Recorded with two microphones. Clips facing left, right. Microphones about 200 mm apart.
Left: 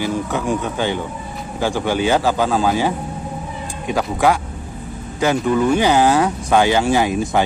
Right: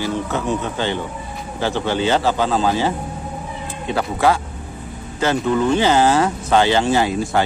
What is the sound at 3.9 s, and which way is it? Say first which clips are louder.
Speech: left 1 dB; 15° left (ahead or behind).